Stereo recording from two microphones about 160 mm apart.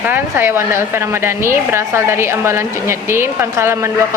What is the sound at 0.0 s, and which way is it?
A woman's voice, 10° right (ahead or behind).